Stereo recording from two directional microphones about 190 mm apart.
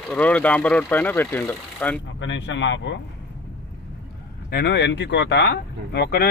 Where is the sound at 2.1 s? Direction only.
70° left (ahead or behind).